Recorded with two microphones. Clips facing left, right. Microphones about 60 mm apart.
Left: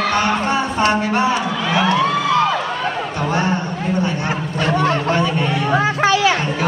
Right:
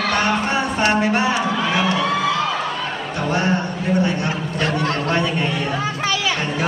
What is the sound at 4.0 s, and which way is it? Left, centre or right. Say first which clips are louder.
Speech: even; left.